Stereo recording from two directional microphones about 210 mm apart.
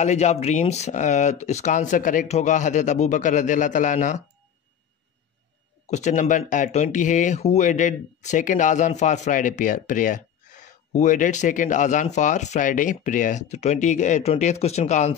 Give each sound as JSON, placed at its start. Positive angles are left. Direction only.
{"t": 0.0, "sound": "speech", "side_deg": 30}
{"t": 5.9, "sound": "speech", "side_deg": 35}